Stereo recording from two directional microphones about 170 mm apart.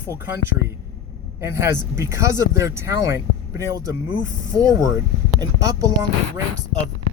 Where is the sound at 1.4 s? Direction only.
15° right (ahead or behind).